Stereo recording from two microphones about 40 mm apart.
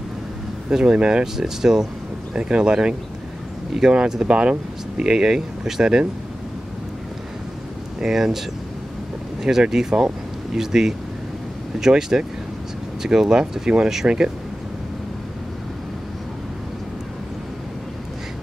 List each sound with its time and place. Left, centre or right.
0.7 s speech: right
1.2 s speech: centre
2.3 s speech: right
8.0 s speech: centre